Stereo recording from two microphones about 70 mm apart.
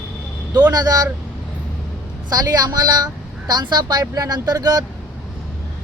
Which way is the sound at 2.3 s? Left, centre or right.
Right.